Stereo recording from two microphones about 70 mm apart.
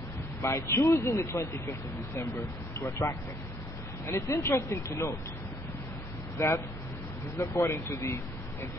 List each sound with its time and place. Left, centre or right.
0.4 s speech: left
2.8 s speech: left
6.3 s speech: left